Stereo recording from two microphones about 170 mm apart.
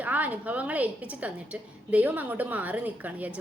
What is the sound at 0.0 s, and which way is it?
A woman's voice, 10° right (ahead or behind).